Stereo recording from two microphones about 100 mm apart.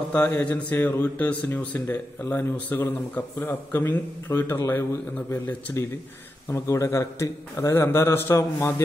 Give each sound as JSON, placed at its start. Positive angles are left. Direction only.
{"t": 0.1, "sound": "speech", "side_deg": 15}